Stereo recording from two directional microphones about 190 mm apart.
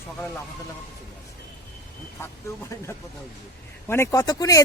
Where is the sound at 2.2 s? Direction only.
15° left (ahead or behind).